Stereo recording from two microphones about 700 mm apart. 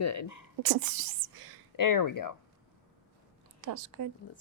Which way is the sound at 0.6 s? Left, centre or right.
Right.